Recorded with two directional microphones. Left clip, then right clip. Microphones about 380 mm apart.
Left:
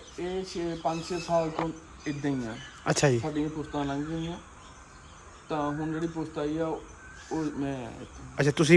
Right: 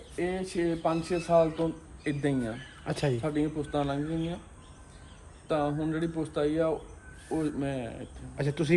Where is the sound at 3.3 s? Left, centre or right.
Centre.